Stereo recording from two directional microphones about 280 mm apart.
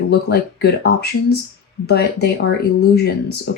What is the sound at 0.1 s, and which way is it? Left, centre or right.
Speech, left.